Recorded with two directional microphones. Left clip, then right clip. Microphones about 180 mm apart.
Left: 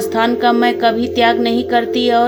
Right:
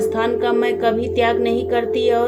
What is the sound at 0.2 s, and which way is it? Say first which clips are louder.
A woman's voice: left 8 dB; 60° left (ahead or behind).